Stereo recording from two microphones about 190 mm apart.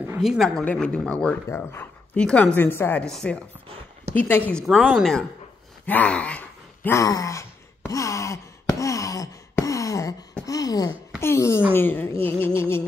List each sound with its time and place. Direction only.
0.0 s speech: 5° right (ahead or behind)
5.9 s a sound: 5° left (ahead or behind)
11.1 s speech: 15° left (ahead or behind)